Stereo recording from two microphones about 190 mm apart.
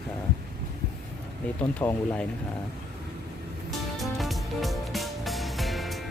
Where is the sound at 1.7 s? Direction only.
10° left (ahead or behind).